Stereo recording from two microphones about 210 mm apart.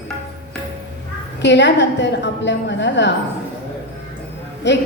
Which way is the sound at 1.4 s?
55° left (ahead or behind).